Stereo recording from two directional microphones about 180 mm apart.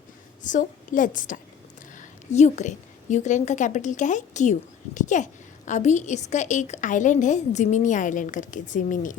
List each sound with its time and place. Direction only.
0.4 s a woman's voice: 45° left (ahead or behind)